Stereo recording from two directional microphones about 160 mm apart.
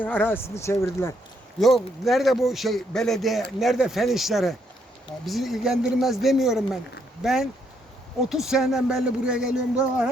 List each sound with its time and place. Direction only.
0.0 s speech: 15° left (ahead or behind)
1.5 s a man's voice: centre (ahead or behind)